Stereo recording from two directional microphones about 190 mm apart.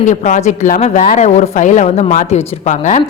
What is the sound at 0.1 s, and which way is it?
A woman's voice, 40° left (ahead or behind).